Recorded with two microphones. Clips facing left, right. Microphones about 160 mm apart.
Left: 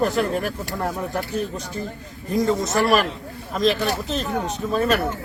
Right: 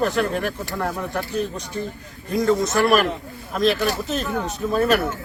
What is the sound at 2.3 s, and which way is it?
Speech, centre (ahead or behind).